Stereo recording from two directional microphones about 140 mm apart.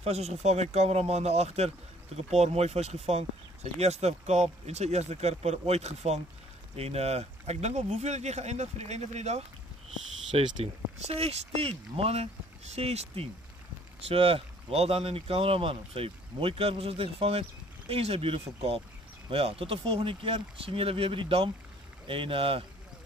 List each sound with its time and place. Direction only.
0.0 s speech: 50° right (ahead or behind)